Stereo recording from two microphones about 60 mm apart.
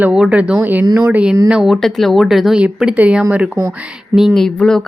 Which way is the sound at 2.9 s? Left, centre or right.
Right.